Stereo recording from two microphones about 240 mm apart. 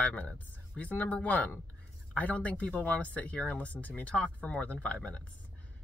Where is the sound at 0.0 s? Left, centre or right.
Centre.